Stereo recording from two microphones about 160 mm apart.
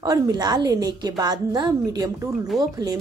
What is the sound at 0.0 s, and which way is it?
Speech, 25° right (ahead or behind).